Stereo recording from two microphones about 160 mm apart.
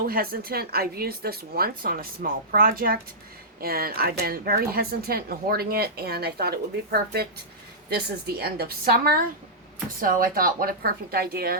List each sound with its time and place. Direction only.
0.0 s speech: 70° right (ahead or behind)
10.0 s a woman's voice: 60° right (ahead or behind)